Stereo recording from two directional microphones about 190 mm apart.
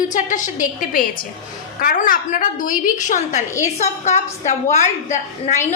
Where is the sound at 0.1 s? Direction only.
40° left (ahead or behind).